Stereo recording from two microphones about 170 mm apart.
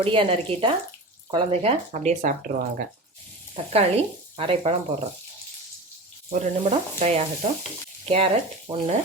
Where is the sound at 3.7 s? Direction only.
35° right (ahead or behind).